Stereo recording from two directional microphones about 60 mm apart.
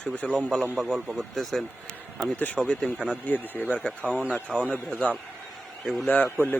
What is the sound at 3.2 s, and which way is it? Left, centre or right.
Speech, left.